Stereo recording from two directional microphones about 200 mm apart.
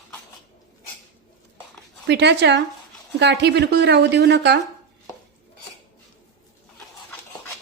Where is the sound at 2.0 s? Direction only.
60° right (ahead or behind).